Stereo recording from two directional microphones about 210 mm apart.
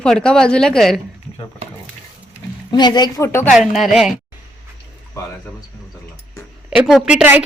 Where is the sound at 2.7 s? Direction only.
20° left (ahead or behind).